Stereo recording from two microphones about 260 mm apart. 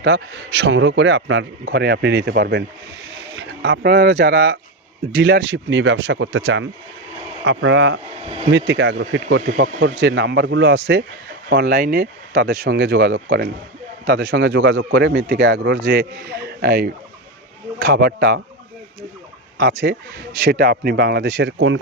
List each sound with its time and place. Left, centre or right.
0.0 s speech: right
8.2 s speech: right
8.5 s speech: right
19.5 s speech: right